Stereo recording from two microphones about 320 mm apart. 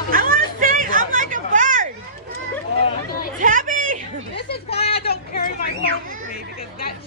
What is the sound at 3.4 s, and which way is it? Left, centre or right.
Chatter, right.